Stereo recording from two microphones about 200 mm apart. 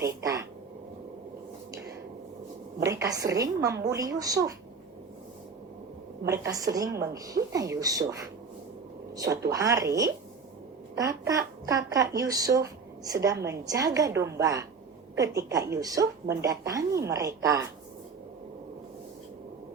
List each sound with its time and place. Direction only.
0.0 s speech: 15° right (ahead or behind)
2.8 s speech: 15° right (ahead or behind)
6.2 s speech: 15° right (ahead or behind)
9.1 s a woman's voice: 15° right (ahead or behind)